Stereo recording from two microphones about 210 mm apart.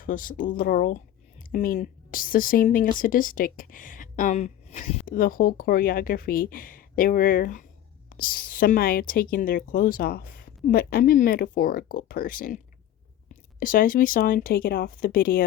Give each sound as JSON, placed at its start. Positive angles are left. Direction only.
{"t": 0.0, "sound": "a woman's voice", "side_deg": 40}
{"t": 13.6, "sound": "a woman's voice", "side_deg": 40}